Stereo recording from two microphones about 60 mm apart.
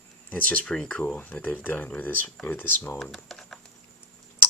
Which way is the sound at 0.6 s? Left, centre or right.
Centre.